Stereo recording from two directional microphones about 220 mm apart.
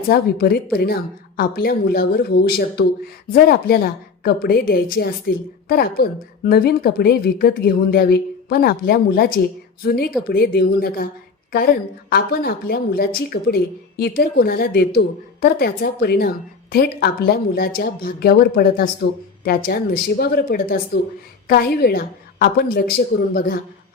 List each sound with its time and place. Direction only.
0.1 s speech: 45° left (ahead or behind)
12.1 s speech: 45° left (ahead or behind)